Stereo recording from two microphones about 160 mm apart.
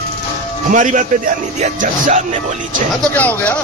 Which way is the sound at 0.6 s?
55° right (ahead or behind).